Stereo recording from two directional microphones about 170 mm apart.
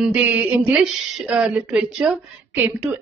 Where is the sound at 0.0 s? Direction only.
10° right (ahead or behind).